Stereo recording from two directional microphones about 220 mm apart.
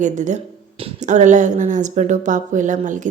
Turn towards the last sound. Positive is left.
turn(degrees=-35)  # may be behind; listen again after turning